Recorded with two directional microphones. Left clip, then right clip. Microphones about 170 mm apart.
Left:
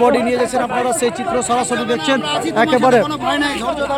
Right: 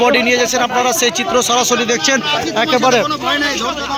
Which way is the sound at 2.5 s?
20° left (ahead or behind).